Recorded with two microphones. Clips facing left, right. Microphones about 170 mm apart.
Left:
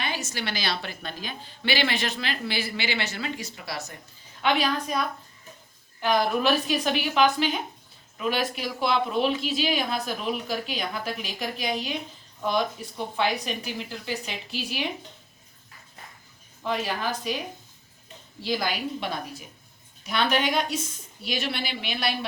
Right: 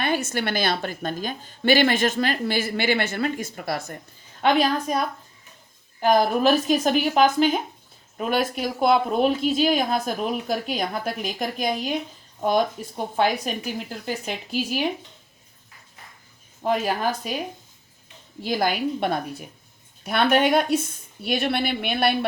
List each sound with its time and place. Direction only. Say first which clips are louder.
0.0 s a woman's voice: right 7 dB; 55° right (ahead or behind)
16.6 s a woman's voice: right 5 dB; 45° right (ahead or behind)
18.4 s a woman's voice: right 5 dB; 50° right (ahead or behind)